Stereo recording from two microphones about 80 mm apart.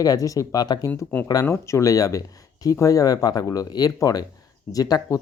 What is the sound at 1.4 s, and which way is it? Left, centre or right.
Speech, left.